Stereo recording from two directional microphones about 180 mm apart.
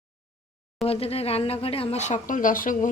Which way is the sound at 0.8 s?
35° left (ahead or behind).